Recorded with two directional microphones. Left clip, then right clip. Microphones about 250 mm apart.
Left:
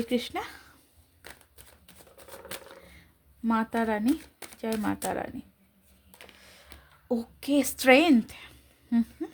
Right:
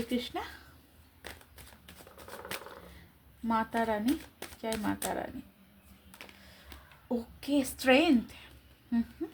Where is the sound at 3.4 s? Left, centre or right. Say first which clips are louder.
Left 2 dB; left.